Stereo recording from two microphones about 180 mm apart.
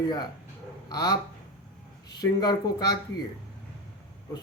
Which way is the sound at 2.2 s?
20° left (ahead or behind).